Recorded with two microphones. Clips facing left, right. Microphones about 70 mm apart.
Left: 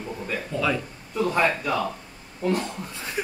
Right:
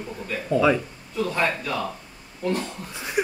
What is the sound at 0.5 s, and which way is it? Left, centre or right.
Speech, right.